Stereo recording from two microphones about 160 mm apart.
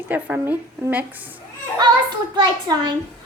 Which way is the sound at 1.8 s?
25° right (ahead or behind).